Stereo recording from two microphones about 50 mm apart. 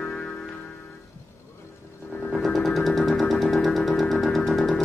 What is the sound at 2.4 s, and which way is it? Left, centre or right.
Music, centre.